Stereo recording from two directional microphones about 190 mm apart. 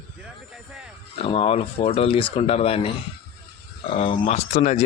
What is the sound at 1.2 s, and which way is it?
Speech, 30° left (ahead or behind).